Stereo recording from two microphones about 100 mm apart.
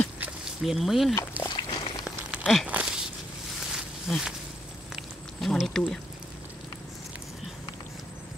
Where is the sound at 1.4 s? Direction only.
50° left (ahead or behind).